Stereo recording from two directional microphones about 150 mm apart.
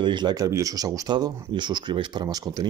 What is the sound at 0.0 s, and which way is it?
Speech, 30° right (ahead or behind).